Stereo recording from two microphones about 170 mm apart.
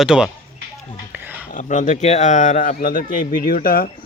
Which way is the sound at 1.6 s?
45° left (ahead or behind).